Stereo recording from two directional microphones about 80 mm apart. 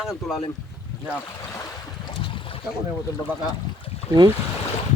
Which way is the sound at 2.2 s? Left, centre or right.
Left.